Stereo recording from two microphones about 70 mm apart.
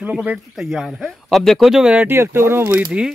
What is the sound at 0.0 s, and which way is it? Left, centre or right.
Speech, centre.